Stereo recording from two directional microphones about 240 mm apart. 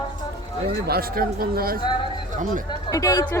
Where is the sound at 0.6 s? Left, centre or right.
Right.